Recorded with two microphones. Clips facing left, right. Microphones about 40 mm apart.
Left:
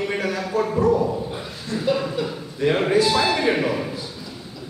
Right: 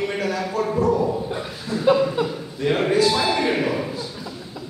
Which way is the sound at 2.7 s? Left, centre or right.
Centre.